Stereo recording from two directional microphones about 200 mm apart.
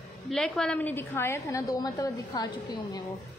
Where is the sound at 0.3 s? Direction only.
5° left (ahead or behind); by 3.0 s 20° left (ahead or behind).